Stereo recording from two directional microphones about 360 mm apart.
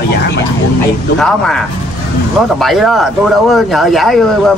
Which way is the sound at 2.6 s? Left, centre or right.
Centre.